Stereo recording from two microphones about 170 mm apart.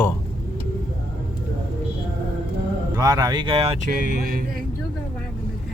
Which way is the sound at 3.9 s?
55° right (ahead or behind).